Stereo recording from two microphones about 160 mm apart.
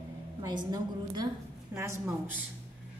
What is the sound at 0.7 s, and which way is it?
A woman's voice, 25° right (ahead or behind).